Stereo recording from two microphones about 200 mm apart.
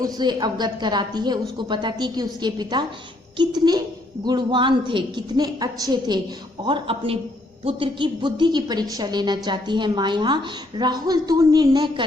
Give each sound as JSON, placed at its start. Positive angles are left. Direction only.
{"t": 0.0, "sound": "a woman's voice", "side_deg": -20}